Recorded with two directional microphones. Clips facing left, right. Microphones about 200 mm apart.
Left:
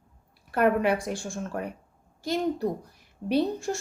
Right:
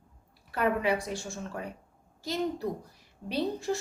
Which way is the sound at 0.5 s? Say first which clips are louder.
Left 5 dB; 55° left (ahead or behind).